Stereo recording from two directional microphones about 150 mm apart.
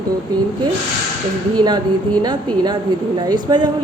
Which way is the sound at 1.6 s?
30° right (ahead or behind).